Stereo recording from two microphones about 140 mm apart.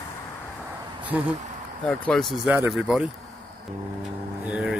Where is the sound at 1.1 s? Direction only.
10° right (ahead or behind).